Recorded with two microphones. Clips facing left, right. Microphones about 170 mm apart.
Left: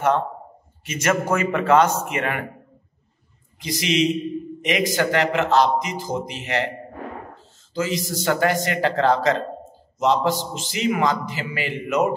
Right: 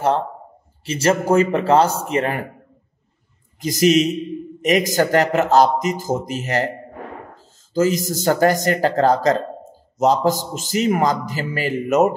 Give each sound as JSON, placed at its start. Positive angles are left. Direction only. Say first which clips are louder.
{"t": 0.8, "sound": "speech", "louder": "right 4 dB", "side_deg": -30}
{"t": 3.5, "sound": "a man's voice", "louder": "right 7 dB", "side_deg": -45}
{"t": 7.7, "sound": "a man's voice", "louder": "right 6 dB", "side_deg": -45}